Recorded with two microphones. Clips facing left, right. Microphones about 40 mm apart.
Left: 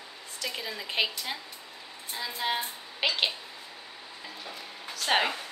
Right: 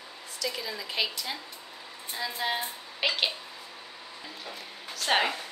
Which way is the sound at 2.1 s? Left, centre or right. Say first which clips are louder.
Even; centre.